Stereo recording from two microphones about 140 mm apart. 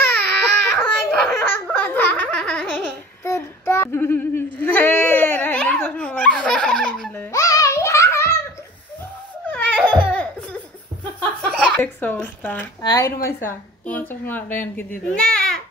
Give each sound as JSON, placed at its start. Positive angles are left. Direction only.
{"t": 0.0, "sound": "baby cry", "side_deg": 10}
{"t": 3.3, "sound": "a sound", "side_deg": 20}
{"t": 7.2, "sound": "music", "side_deg": 25}
{"t": 10.1, "sound": "laughter", "side_deg": 10}
{"t": 11.1, "sound": "a sound", "side_deg": 10}
{"t": 12.8, "sound": "speech", "side_deg": 25}
{"t": 13.5, "sound": "a woman's voice", "side_deg": 10}
{"t": 15.1, "sound": "babbling", "side_deg": 5}